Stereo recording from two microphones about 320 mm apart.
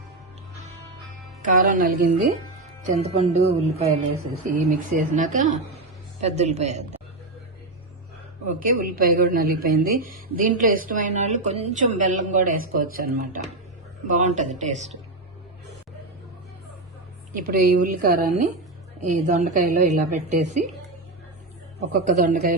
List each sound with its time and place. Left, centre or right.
1.4 s a woman's voice: right
8.4 s a woman's voice: right
17.3 s a woman's voice: right
21.8 s a woman's voice: right